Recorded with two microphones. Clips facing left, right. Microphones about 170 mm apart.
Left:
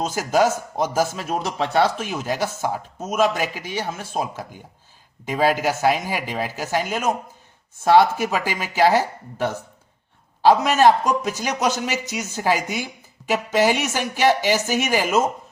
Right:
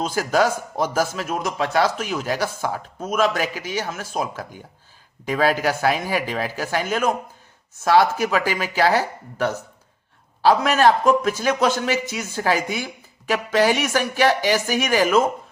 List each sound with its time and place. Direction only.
0.1 s speech: 20° left (ahead or behind)
1.3 s a man's voice: 30° left (ahead or behind)